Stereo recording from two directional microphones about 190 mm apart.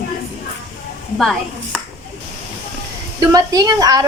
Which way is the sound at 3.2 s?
20° right (ahead or behind).